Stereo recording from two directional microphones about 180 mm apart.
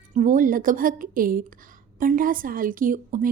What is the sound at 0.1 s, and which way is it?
A woman's voice, 45° right (ahead or behind).